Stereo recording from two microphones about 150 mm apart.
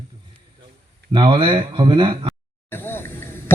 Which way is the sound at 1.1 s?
35° right (ahead or behind).